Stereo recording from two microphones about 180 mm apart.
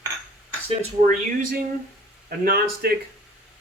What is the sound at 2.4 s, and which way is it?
Speech, 60° right (ahead or behind).